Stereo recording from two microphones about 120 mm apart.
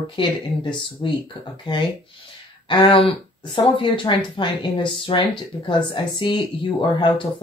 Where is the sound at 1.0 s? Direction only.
45° left (ahead or behind).